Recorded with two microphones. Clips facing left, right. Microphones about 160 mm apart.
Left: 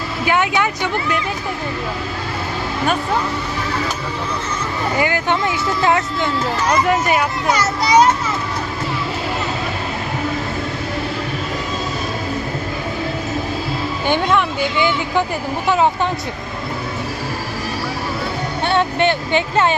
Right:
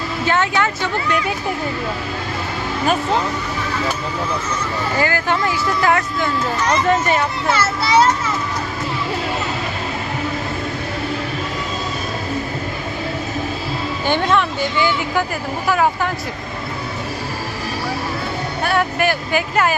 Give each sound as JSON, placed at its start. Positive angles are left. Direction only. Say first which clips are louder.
{"t": 0.3, "sound": "a child's voice", "louder": "left 1 dB", "side_deg": 15}
{"t": 4.9, "sound": "speech", "louder": "even", "side_deg": 20}
{"t": 6.7, "sound": "a child's voice", "louder": "even", "side_deg": 10}
{"t": 14.1, "sound": "a child's voice", "louder": "even", "side_deg": 15}
{"t": 18.6, "sound": "speech", "louder": "left 2 dB", "side_deg": 25}